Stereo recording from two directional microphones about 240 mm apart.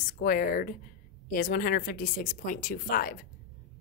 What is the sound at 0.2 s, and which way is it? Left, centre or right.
A woman's voice, left.